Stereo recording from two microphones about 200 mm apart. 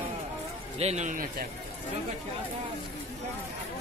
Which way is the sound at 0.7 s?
35° right (ahead or behind).